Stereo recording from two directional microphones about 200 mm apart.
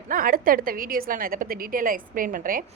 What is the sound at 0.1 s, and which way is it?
A woman's voice, 45° right (ahead or behind).